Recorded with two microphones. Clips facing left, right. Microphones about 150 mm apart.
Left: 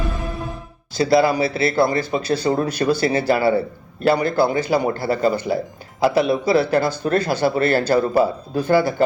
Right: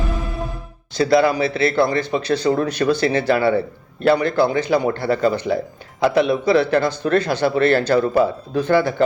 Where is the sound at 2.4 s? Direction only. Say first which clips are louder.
Right 1 dB; 30° left (ahead or behind).